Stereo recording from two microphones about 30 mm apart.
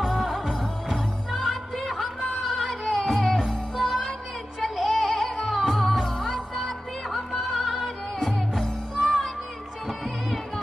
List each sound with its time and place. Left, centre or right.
1.3 s music: centre